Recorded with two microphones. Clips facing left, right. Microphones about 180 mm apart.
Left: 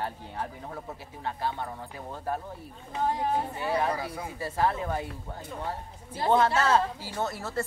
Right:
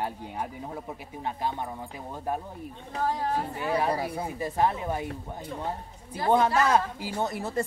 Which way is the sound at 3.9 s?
30° right (ahead or behind).